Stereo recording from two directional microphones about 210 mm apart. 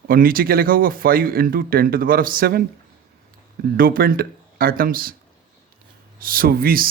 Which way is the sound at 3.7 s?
45° right (ahead or behind).